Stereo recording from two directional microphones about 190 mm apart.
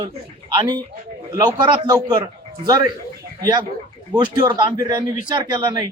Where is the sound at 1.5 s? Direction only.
20° right (ahead or behind).